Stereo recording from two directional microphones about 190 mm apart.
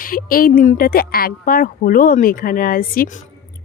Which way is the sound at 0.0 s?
50° left (ahead or behind).